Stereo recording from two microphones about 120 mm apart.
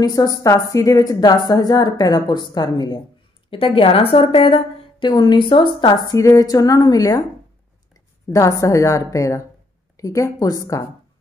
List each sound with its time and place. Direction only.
0.0 s a woman's voice: 30° left (ahead or behind)
3.4 s a woman's voice: 50° left (ahead or behind); by 10.9 s 25° left (ahead or behind)